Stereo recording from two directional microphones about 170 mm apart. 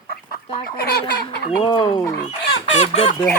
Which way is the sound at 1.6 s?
25° left (ahead or behind).